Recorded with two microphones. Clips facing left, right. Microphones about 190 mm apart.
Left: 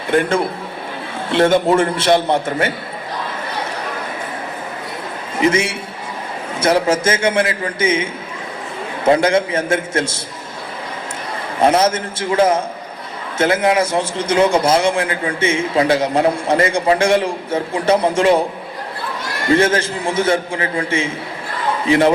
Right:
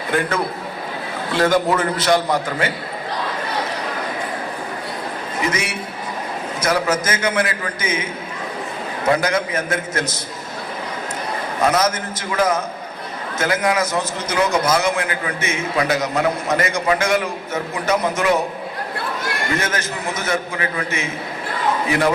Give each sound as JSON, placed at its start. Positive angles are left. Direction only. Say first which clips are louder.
{"t": 0.1, "sound": "a man's voice", "louder": "left 5 dB", "side_deg": 25}
{"t": 5.4, "sound": "a man's voice", "louder": "left 8 dB", "side_deg": 25}
{"t": 9.0, "sound": "a man's voice", "louder": "left 5 dB", "side_deg": 25}
{"t": 11.6, "sound": "a man's voice", "louder": "left 4 dB", "side_deg": 30}
{"t": 19.5, "sound": "a man's voice", "louder": "left 8 dB", "side_deg": 30}